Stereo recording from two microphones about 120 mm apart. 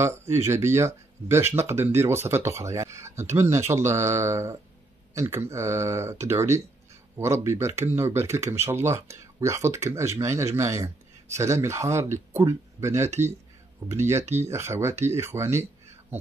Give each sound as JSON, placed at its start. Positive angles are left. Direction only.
{"t": 0.0, "sound": "speech", "side_deg": -20}